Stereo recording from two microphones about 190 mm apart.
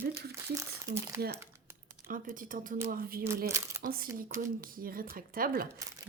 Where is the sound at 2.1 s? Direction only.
45° right (ahead or behind).